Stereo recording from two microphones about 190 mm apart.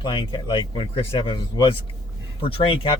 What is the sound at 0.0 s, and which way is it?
Speech, 25° left (ahead or behind).